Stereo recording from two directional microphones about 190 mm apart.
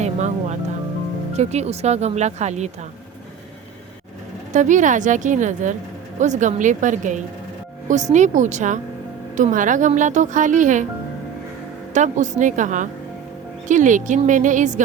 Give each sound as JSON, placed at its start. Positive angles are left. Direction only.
{"t": 0.0, "sound": "music", "side_deg": -40}
{"t": 1.3, "sound": "speech", "side_deg": -35}
{"t": 4.5, "sound": "speech", "side_deg": -40}
{"t": 11.9, "sound": "speech", "side_deg": -40}